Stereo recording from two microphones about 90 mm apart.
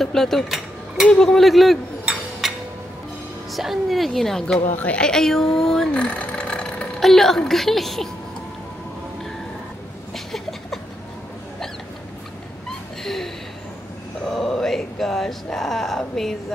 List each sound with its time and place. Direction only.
0.0 s cutlery: 5° left (ahead or behind)
1.0 s speech: 5° left (ahead or behind)
3.5 s a woman's voice: centre (ahead or behind)
10.1 s a sound: centre (ahead or behind)
13.0 s a sound: 5° left (ahead or behind)
14.2 s speech: 5° left (ahead or behind)